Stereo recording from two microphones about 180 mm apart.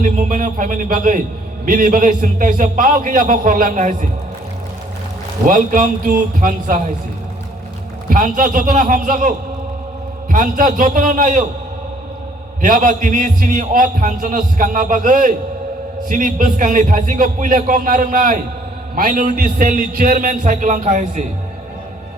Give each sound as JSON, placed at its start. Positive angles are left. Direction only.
{"t": 0.0, "sound": "a man's voice", "side_deg": -45}
{"t": 5.5, "sound": "a man's voice", "side_deg": -50}
{"t": 8.1, "sound": "a man's voice", "side_deg": -50}
{"t": 12.6, "sound": "a man's voice", "side_deg": -50}